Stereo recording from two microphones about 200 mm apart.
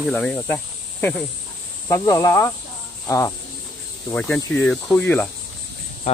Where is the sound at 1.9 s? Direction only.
15° left (ahead or behind).